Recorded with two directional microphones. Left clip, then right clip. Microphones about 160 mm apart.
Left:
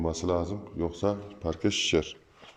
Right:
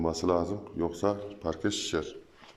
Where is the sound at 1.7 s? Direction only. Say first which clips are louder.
Left 5 dB; 15° left (ahead or behind).